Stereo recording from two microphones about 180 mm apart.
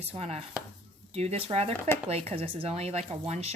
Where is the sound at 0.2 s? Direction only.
35° right (ahead or behind).